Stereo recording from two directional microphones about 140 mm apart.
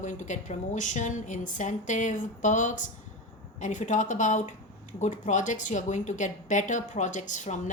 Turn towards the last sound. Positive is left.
turn(degrees=60)  # may be behind; listen again after turning